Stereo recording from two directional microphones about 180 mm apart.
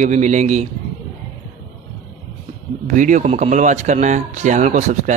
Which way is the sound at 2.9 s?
45° right (ahead or behind).